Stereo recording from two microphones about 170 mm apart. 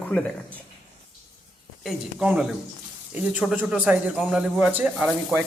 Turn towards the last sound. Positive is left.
turn(degrees=-5)  # may be behind; listen again after turning